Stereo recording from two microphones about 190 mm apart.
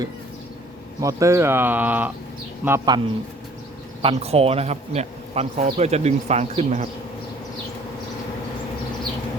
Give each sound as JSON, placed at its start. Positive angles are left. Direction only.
{"t": 1.0, "sound": "speech", "side_deg": -15}
{"t": 4.0, "sound": "speech", "side_deg": -30}